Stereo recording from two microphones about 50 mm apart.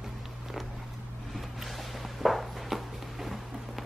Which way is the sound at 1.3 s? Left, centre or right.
Centre.